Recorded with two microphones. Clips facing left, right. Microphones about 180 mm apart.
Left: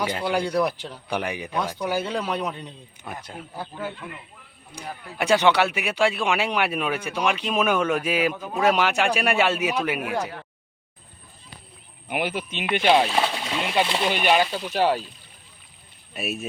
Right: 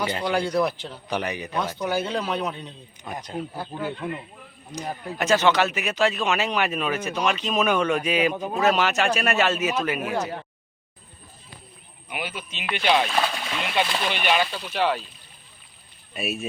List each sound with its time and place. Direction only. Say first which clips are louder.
0.0 s speech: even; 10° left (ahead or behind)
3.7 s speech: right 4 dB; 25° right (ahead or behind)
5.1 s speech: left 1 dB; 15° left (ahead or behind)
12.0 s speech: left 6 dB; 55° left (ahead or behind)
12.9 s speech: left 2 dB; 20° left (ahead or behind)
14.1 s speech: left 3 dB; 40° left (ahead or behind)
14.3 s speech: left 3 dB; 20° left (ahead or behind)
14.7 s speech: left 2 dB; 40° left (ahead or behind)
16.1 s speech: right 1 dB; centre (ahead or behind)